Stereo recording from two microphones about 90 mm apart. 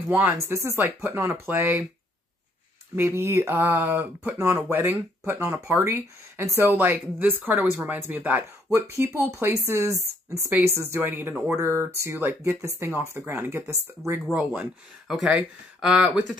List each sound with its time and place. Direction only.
0.5 s speech: 30° right (ahead or behind)
3.0 s speech: 30° right (ahead or behind)
8.6 s speech: 35° right (ahead or behind)
14.3 s speech: 15° right (ahead or behind)
15.0 s speech: 5° right (ahead or behind)